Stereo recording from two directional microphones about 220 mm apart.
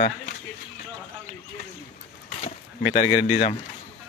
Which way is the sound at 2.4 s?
30° left (ahead or behind).